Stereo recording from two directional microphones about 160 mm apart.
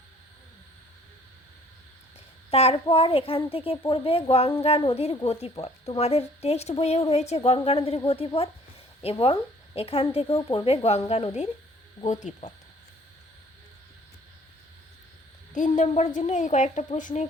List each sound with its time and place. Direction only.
2.5 s a woman's voice: 40° left (ahead or behind)
15.5 s a woman's voice: 50° left (ahead or behind)